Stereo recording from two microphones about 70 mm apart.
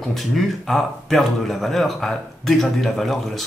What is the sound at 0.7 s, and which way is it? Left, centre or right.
Speech, centre.